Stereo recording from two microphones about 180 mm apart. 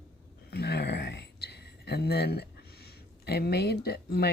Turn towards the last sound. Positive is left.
turn(degrees=60)  # may be behind; listen again after turning